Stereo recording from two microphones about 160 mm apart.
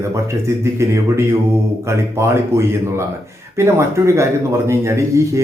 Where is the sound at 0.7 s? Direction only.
15° right (ahead or behind).